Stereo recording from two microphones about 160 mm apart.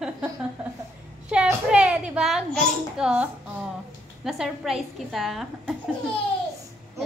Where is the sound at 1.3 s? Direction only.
5° right (ahead or behind).